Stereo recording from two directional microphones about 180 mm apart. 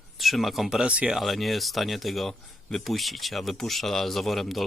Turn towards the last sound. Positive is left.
turn(degrees=0)  # may be behind; listen again after turning